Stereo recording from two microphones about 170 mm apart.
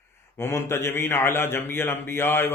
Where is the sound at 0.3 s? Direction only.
15° left (ahead or behind).